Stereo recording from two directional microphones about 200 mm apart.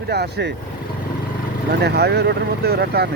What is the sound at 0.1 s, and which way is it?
Speech, 55° right (ahead or behind).